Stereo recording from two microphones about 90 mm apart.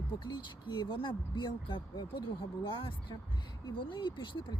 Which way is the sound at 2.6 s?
75° left (ahead or behind).